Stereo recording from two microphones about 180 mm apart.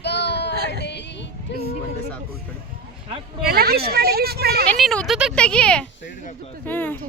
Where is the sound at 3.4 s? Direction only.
60° right (ahead or behind).